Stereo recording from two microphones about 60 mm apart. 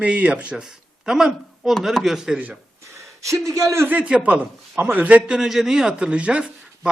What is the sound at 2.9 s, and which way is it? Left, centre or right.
Speech, right.